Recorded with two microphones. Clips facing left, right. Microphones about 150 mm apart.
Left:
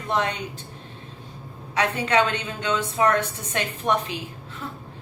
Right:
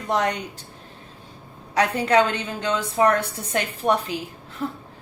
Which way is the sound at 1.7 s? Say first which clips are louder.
Right 3 dB; 35° right (ahead or behind).